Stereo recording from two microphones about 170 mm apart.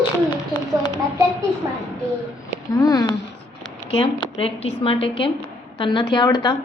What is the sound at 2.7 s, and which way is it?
A woman's voice, 20° left (ahead or behind).